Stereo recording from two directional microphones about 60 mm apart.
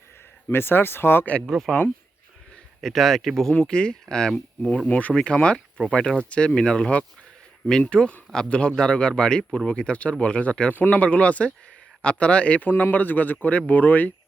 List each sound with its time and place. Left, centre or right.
0.4 s speech: left
1.4 s speech: centre
2.8 s speech: centre
4.9 s speech: left